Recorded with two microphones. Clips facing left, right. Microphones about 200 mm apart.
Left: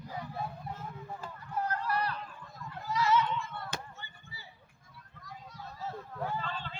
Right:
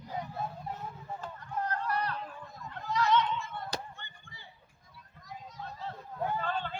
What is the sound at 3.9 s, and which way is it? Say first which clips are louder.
Chop: left 1 dB; 5° left (ahead or behind).